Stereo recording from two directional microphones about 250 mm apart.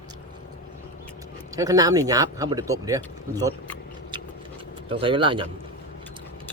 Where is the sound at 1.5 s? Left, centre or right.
Centre.